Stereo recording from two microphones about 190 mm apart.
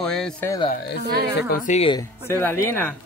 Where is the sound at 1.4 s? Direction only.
55° left (ahead or behind).